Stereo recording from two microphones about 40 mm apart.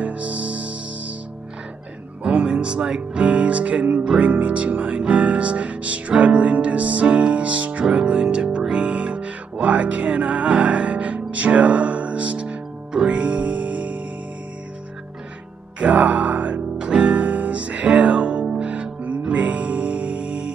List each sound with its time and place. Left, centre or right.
0.0 s music: right
2.2 s music: right
4.2 s speech: right
7.8 s music: right
15.8 s music: right